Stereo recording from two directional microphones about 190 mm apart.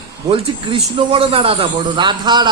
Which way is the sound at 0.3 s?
30° right (ahead or behind).